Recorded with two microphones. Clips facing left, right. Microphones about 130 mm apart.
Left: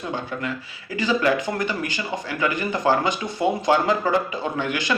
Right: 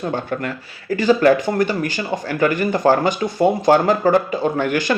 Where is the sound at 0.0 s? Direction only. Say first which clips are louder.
Right 5 dB; 50° right (ahead or behind).